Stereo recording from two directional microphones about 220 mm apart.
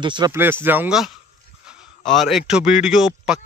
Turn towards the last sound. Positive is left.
turn(degrees=0)  # may be behind; listen again after turning